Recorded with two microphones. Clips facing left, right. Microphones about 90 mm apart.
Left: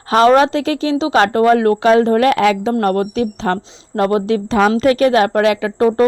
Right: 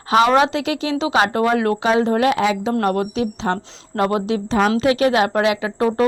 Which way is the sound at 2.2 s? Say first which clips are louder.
Left 4 dB; 65° left (ahead or behind).